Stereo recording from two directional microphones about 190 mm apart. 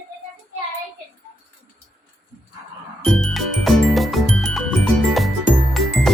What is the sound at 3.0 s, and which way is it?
Music, centre (ahead or behind).